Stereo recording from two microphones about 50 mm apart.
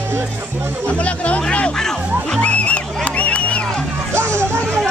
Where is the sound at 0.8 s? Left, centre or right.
Left.